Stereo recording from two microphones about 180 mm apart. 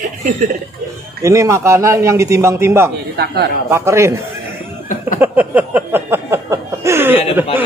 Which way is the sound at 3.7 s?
15° right (ahead or behind).